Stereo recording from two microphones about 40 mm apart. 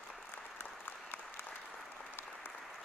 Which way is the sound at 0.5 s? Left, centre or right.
Left.